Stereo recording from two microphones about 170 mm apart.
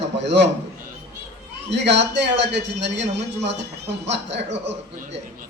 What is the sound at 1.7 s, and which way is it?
A man's voice, 90° right.